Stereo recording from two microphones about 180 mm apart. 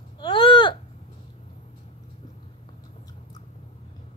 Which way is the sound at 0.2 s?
25° left (ahead or behind).